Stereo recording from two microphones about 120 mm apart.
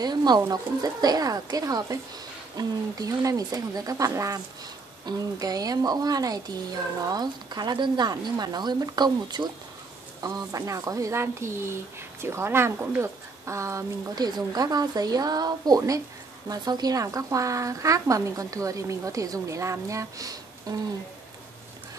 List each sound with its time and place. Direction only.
0.0 s a woman's voice: 35° right (ahead or behind)